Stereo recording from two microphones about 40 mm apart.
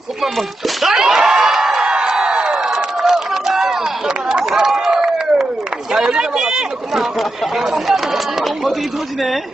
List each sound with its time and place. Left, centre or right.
0.8 s a sound: centre
2.3 s crowd: centre
4.3 s run: centre
5.9 s chatter: centre